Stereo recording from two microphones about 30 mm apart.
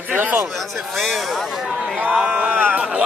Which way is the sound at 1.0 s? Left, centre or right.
Centre.